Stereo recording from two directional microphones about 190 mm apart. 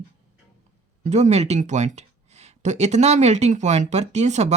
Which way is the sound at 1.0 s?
35° right (ahead or behind).